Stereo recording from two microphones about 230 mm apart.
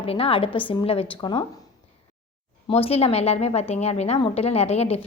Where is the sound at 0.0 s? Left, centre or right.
Left.